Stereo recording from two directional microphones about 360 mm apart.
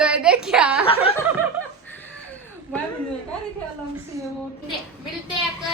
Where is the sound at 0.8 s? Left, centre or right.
Centre.